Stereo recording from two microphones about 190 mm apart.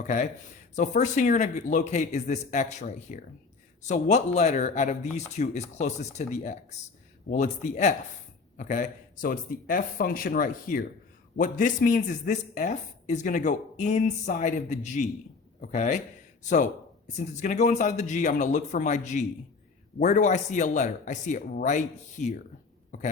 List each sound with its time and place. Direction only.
0.8 s speech: 40° left (ahead or behind)